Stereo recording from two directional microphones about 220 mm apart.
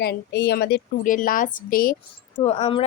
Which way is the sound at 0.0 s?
50° left (ahead or behind).